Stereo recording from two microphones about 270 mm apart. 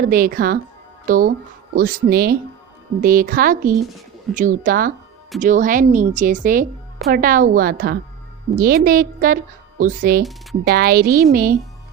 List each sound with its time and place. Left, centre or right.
0.1 s a woman's voice: right